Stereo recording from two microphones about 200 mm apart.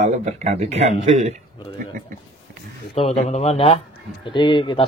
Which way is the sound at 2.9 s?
30° left (ahead or behind).